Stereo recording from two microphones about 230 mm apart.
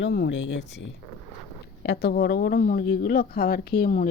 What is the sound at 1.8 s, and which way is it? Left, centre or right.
Speech, left.